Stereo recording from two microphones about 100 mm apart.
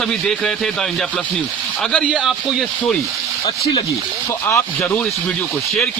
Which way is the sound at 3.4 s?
45° left (ahead or behind).